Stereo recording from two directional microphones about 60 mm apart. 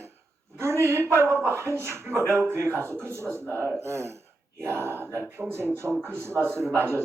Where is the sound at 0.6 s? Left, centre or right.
Right.